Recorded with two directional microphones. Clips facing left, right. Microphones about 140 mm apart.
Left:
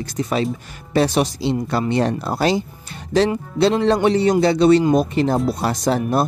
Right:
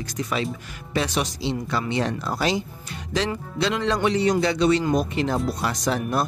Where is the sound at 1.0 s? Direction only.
40° left (ahead or behind).